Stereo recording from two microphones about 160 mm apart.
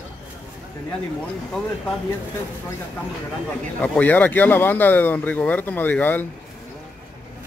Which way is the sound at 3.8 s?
10° left (ahead or behind).